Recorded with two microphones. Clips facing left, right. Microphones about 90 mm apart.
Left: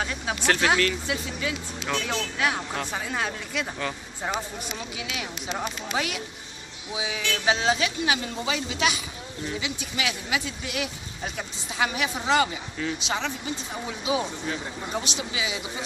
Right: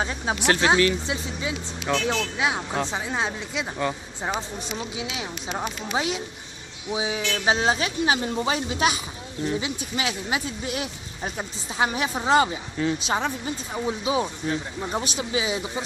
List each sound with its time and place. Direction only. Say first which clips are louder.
0.0 s speech: right 3 dB; 30° right (ahead or behind)